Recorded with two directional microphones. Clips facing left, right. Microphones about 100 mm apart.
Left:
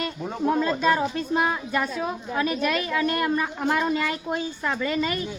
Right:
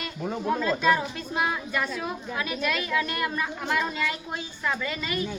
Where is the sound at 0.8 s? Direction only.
35° left (ahead or behind).